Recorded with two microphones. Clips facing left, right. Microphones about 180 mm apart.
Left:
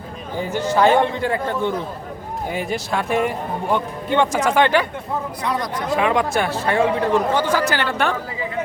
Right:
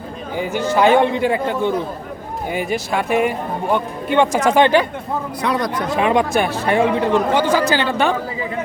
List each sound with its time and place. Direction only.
0.8 s speech: 15° right (ahead or behind)
2.5 s speech: 5° right (ahead or behind)
5.4 s speech: 70° right (ahead or behind)
6.0 s speech: 20° right (ahead or behind)